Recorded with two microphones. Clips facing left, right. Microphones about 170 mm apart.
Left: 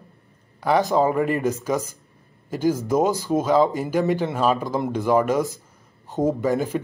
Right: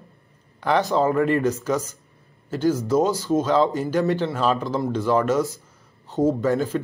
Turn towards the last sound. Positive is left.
turn(degrees=15)  # may be behind; listen again after turning